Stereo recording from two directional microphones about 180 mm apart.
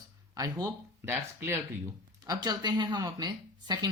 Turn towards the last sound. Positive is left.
turn(degrees=-20)  # may be behind; listen again after turning